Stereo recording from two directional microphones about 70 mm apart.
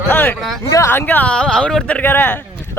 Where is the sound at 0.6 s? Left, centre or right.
Left.